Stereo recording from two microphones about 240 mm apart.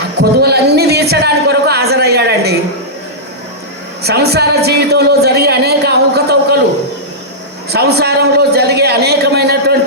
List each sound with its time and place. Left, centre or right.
0.2 s a sound: right
4.0 s a woman's voice: right
7.7 s a woman's voice: right